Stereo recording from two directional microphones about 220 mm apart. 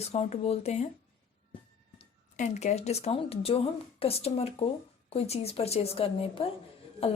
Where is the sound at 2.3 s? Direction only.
35° left (ahead or behind).